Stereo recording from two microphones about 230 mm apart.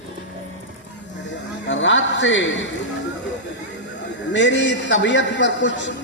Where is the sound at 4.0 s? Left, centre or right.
Left.